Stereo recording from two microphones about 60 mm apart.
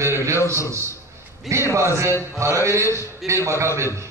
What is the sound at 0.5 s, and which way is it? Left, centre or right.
A man's voice, right.